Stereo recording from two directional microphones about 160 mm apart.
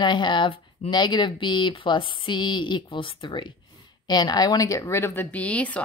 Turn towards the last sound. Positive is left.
turn(degrees=10)  # may be behind; listen again after turning